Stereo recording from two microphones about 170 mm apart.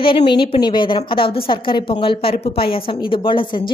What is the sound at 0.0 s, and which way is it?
A woman's voice, 30° left (ahead or behind).